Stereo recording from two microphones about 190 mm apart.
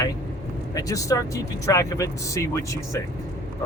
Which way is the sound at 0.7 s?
20° left (ahead or behind).